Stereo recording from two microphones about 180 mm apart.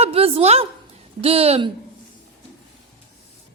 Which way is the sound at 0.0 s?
30° right (ahead or behind).